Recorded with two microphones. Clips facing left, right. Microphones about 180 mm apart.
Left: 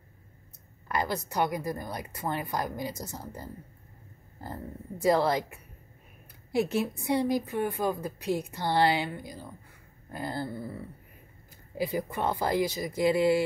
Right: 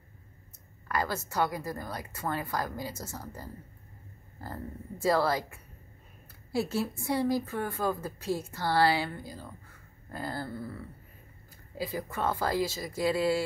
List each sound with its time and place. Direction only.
0.8 s a woman's voice: 20° left (ahead or behind)
5.0 s a woman's voice: 20° left (ahead or behind)